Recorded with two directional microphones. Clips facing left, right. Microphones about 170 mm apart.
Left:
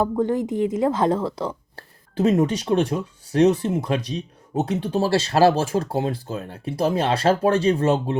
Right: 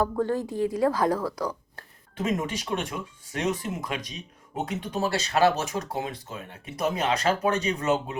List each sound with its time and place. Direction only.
0.0 s speech: 20° left (ahead or behind)